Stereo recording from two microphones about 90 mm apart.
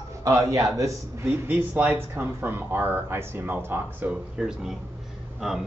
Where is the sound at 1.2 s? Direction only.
20° right (ahead or behind).